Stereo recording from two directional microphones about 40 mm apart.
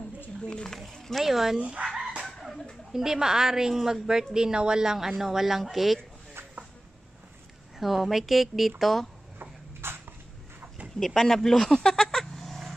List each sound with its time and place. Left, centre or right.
0.7 s a woman's voice: centre
1.6 s speech: right
2.9 s a woman's voice: centre
7.8 s a woman's voice: centre
9.4 s a sound: right
11.0 s speech: centre